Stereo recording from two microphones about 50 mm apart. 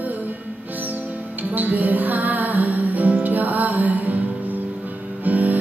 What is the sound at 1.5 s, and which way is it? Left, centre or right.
Music, right.